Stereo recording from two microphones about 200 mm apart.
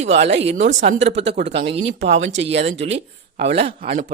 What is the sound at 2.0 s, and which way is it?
Speech, 65° right (ahead or behind).